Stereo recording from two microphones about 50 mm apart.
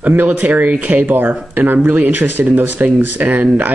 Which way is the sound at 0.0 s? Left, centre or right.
Right.